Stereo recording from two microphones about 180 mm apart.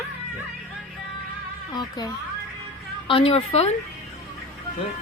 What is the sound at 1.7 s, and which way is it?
A child's voice, 20° left (ahead or behind).